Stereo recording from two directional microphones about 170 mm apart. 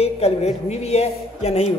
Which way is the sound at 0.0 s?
40° left (ahead or behind).